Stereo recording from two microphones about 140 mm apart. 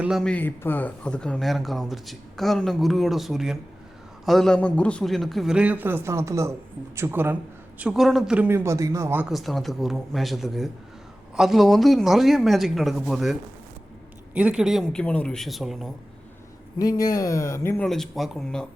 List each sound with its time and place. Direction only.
0.0 s a man's voice: centre (ahead or behind); by 7.3 s 15° right (ahead or behind)
7.8 s a man's voice: 5° right (ahead or behind)
9.3 s speech: centre (ahead or behind)
14.3 s speech: 5° right (ahead or behind)
15.0 s speech: 10° left (ahead or behind)
16.7 s speech: 25° left (ahead or behind)
17.8 s speech: 5° left (ahead or behind)